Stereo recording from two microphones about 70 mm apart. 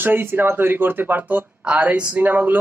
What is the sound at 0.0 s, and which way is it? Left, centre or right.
Speech, right.